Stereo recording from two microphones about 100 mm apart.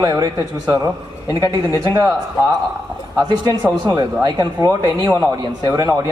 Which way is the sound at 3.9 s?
40° right (ahead or behind).